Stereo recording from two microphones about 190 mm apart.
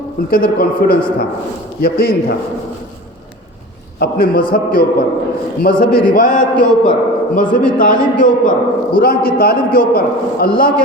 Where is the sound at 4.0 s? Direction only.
55° left (ahead or behind).